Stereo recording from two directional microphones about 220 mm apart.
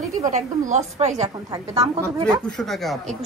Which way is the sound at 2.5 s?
Centre (ahead or behind).